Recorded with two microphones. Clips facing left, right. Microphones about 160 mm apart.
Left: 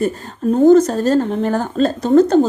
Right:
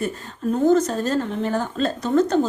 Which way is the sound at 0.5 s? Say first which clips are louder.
Left 7 dB; 40° left (ahead or behind).